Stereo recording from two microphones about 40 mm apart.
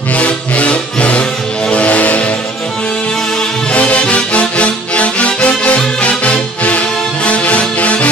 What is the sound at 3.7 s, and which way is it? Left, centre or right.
Music, left.